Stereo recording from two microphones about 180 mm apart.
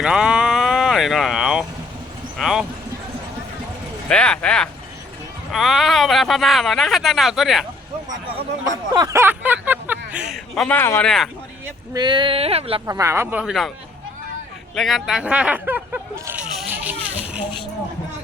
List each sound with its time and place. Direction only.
0.0 s a sound: 5° right (ahead or behind)
2.4 s speech: centre (ahead or behind)
4.1 s speech: 5° left (ahead or behind)
8.6 s speech: 20° right (ahead or behind); by 11.3 s 5° left (ahead or behind)
11.9 s speech: 25° right (ahead or behind)
12.8 s speech: 15° right (ahead or behind)
13.4 s speech: centre (ahead or behind)
14.8 s speech: centre (ahead or behind)